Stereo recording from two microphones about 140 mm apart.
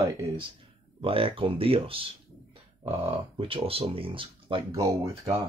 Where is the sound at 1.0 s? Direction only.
40° right (ahead or behind).